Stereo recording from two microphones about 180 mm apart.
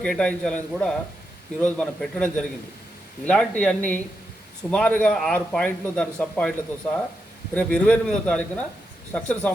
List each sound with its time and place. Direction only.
0.0 s a man's voice: 5° left (ahead or behind)
7.5 s a man's voice: 10° left (ahead or behind)